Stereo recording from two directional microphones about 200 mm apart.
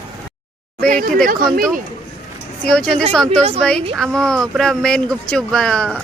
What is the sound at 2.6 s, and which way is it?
A woman's voice, 5° left (ahead or behind).